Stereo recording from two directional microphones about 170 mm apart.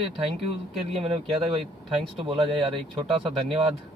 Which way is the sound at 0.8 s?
35° right (ahead or behind).